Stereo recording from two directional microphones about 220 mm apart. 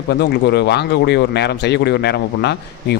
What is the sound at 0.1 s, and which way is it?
A man's voice, 50° left (ahead or behind).